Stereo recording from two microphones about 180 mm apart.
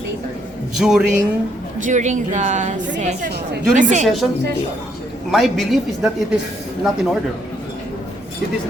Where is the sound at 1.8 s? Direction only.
45° right (ahead or behind).